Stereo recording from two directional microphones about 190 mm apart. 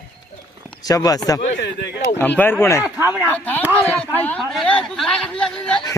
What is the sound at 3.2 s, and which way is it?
A man's voice, 10° left (ahead or behind).